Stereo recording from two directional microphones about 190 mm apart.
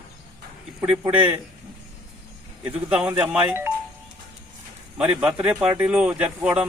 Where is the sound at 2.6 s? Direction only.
5° right (ahead or behind).